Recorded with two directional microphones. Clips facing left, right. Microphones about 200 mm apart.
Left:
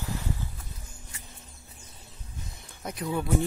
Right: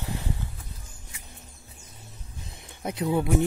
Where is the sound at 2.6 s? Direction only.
20° right (ahead or behind).